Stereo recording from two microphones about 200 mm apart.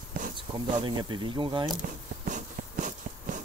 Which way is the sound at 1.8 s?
40° right (ahead or behind).